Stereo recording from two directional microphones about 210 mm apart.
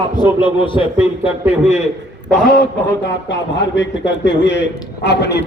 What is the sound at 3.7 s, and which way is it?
A man's voice, 60° left (ahead or behind).